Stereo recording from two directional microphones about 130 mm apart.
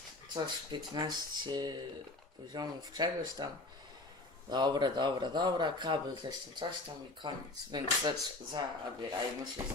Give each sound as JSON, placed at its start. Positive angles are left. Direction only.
{"t": 0.3, "sound": "speech", "side_deg": -35}